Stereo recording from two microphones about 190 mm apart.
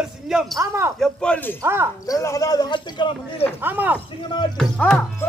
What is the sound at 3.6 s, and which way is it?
Speech, 10° right (ahead or behind).